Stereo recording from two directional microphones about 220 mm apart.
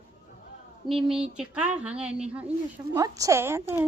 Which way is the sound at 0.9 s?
Centre (ahead or behind).